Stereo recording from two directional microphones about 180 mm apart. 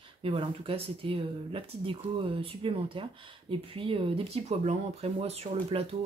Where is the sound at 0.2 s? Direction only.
30° right (ahead or behind).